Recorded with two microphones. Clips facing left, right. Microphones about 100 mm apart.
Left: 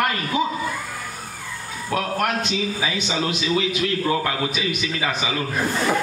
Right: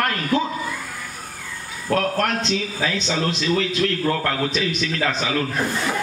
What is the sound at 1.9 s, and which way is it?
A man's voice, 10° left (ahead or behind).